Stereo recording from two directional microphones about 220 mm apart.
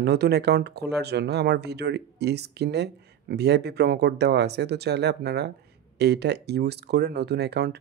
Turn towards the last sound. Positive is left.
turn(degrees=-50)  # may be behind; listen again after turning